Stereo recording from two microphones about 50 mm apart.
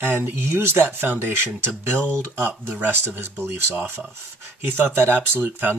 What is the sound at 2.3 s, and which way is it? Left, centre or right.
Speech, right.